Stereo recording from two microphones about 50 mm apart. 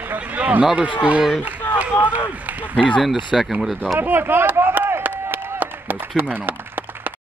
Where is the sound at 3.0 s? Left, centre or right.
Centre.